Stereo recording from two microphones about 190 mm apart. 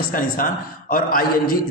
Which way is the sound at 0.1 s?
45° left (ahead or behind).